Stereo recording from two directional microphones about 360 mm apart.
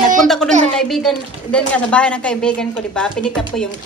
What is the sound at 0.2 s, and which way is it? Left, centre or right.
A woman's voice, centre.